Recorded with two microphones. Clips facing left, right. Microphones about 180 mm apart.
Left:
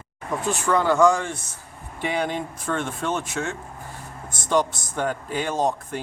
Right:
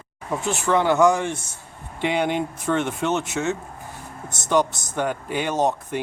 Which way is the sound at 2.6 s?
10° right (ahead or behind).